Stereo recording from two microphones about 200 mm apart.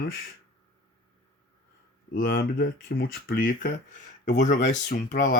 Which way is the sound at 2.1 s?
50° left (ahead or behind).